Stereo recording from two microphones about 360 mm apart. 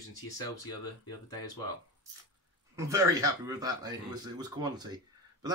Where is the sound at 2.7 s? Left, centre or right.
Centre.